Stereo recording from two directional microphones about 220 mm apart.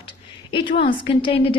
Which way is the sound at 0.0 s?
20° left (ahead or behind).